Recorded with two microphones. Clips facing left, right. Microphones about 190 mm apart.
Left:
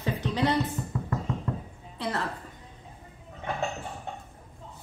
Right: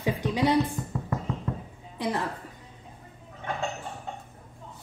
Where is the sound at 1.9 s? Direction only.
15° right (ahead or behind).